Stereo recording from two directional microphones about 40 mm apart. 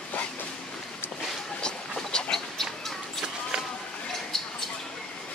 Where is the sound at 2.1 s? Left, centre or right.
Left.